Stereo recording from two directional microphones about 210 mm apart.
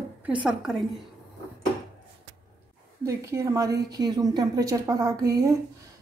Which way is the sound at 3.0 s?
15° right (ahead or behind).